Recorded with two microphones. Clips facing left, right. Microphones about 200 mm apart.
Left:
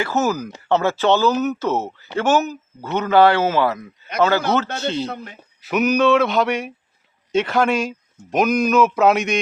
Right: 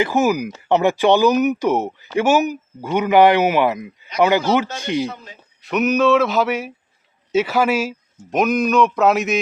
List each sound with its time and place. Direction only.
0.0 s speech: 15° right (ahead or behind)
5.0 s speech: 60° left (ahead or behind)
5.6 s speech: centre (ahead or behind)